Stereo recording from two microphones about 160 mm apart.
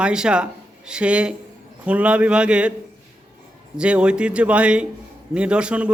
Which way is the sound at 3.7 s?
5° right (ahead or behind).